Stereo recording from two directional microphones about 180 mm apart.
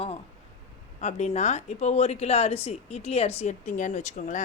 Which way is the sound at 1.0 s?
40° left (ahead or behind).